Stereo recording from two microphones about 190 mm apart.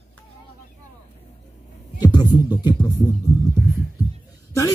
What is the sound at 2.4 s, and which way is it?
Speech, 20° left (ahead or behind).